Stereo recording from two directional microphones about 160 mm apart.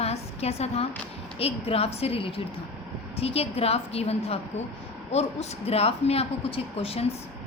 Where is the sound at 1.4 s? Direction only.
40° left (ahead or behind).